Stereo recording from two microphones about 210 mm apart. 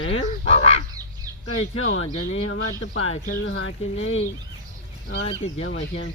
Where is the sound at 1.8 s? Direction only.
65° left (ahead or behind).